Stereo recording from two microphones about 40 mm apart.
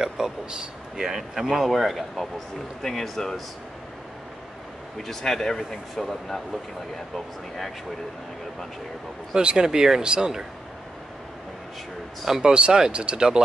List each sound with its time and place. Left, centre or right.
0.0 s speech: centre
4.9 s speech: centre
9.3 s speech: right
12.4 s speech: right